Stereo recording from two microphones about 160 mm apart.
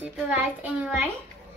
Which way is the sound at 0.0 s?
10° right (ahead or behind).